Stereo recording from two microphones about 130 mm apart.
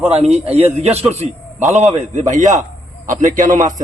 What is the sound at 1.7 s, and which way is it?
Speech, 60° right (ahead or behind).